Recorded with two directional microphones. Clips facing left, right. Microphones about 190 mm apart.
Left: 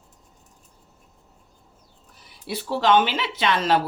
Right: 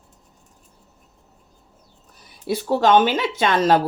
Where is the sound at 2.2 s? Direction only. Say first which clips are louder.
Right 7 dB; 45° right (ahead or behind).